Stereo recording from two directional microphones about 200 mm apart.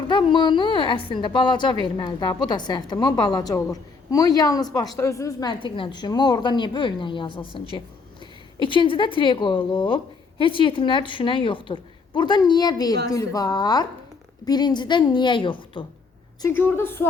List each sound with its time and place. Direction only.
0.1 s a woman's voice: 25° left (ahead or behind)
16.4 s a woman's voice: 10° left (ahead or behind)